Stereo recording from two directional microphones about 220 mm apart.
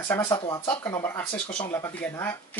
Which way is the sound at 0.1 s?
20° left (ahead or behind).